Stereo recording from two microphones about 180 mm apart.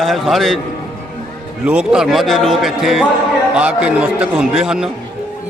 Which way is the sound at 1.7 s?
5° right (ahead or behind).